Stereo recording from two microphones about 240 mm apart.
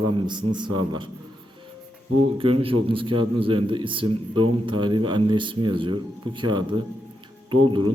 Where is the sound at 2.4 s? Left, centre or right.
Right.